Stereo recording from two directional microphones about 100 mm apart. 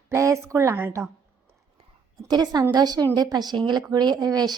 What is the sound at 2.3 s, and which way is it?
A woman's voice, 40° right (ahead or behind).